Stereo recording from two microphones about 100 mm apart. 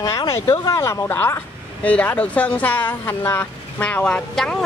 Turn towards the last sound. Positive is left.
turn(degrees=5)  # may be behind; listen again after turning